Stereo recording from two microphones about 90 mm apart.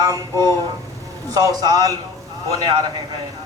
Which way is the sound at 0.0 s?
45° right (ahead or behind).